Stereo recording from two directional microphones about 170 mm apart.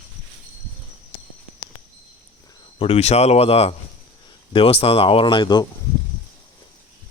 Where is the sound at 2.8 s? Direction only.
35° left (ahead or behind).